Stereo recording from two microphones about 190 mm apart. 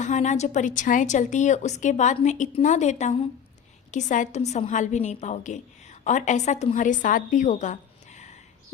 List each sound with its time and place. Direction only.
0.0 s a woman's voice: 40° left (ahead or behind)